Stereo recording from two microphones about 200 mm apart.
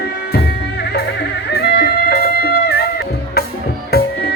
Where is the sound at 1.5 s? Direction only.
55° left (ahead or behind).